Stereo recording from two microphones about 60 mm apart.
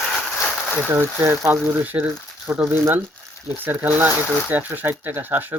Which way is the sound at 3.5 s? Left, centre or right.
Right.